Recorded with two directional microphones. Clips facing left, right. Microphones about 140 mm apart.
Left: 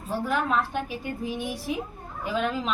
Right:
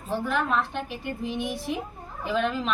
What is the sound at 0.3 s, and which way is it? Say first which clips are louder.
A woman's voice: left 1 dB; 5° left (ahead or behind).